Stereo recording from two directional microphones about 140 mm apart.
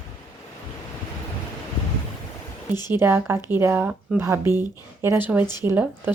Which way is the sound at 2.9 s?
15° right (ahead or behind).